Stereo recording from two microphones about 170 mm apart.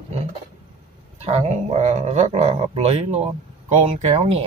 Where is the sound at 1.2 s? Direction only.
40° right (ahead or behind).